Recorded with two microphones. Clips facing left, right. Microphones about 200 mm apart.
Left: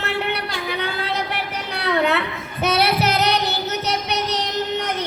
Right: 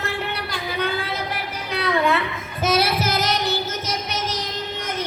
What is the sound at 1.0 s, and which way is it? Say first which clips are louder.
Child singing: left 3 dB; 65° left (ahead or behind).